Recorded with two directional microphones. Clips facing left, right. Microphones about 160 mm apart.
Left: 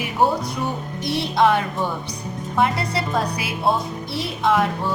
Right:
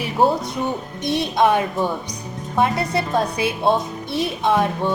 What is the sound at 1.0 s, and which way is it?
A woman's voice, 20° right (ahead or behind).